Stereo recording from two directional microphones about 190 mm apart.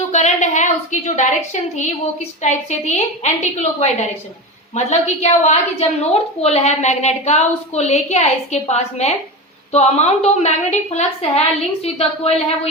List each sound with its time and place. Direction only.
0.1 s a woman's voice: 40° left (ahead or behind)